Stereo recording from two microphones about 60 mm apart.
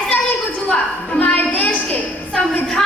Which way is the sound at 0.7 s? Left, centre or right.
Centre.